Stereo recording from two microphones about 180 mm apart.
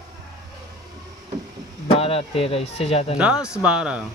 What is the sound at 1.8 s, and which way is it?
Speech, 35° left (ahead or behind).